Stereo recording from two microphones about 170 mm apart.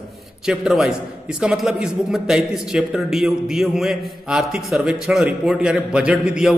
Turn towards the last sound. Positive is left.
turn(degrees=-5)  # may be behind; listen again after turning